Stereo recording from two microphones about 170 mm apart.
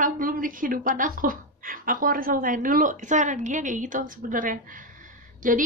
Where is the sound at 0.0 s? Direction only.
55° right (ahead or behind).